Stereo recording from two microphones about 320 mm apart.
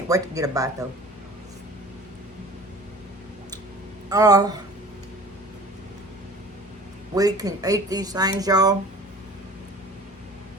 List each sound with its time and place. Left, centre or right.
0.1 s speech: centre
4.1 s speech: centre
7.2 s speech: centre